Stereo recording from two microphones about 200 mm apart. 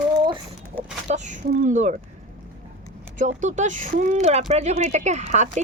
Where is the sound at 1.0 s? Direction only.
35° right (ahead or behind).